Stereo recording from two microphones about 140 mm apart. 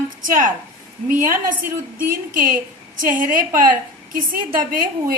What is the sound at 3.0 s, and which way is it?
A woman's voice, 75° right (ahead or behind).